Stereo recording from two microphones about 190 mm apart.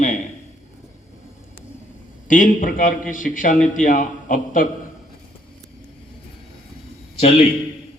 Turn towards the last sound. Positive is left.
turn(degrees=35)  # may be behind; listen again after turning